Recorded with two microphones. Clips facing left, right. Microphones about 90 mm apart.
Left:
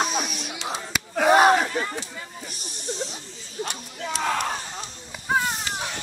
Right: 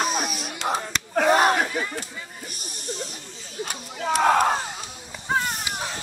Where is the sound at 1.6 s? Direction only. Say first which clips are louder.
Even; 45° left (ahead or behind).